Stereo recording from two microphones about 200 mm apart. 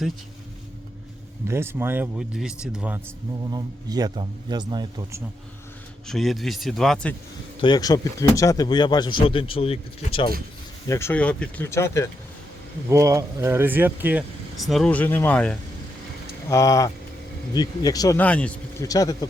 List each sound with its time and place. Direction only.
1.5 s speech: 10° right (ahead or behind)
3.5 s speech: 20° right (ahead or behind)
6.1 s speech: centre (ahead or behind)
7.6 s speech: 20° left (ahead or behind)
10.8 s speech: 15° left (ahead or behind)
12.9 s speech: 15° right (ahead or behind); by 18.2 s 20° left (ahead or behind)
18.2 s speech: 5° left (ahead or behind)